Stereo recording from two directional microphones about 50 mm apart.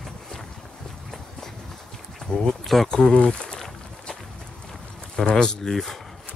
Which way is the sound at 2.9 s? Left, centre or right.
Centre.